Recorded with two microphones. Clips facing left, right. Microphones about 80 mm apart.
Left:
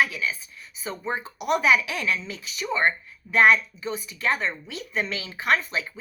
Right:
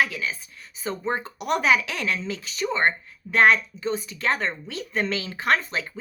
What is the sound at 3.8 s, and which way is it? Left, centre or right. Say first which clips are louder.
Speech: right 4 dB; right.